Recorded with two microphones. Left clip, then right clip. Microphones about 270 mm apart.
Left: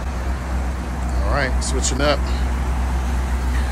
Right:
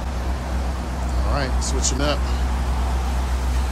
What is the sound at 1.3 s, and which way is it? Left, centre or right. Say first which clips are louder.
Speech: left 4 dB; centre.